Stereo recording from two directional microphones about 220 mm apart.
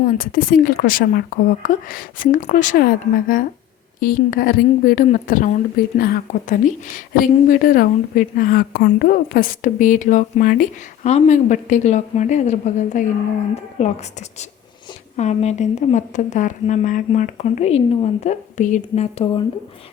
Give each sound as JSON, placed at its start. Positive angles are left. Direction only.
{"t": 0.0, "sound": "a woman's voice", "side_deg": 40}
{"t": 15.1, "sound": "a woman's voice", "side_deg": 30}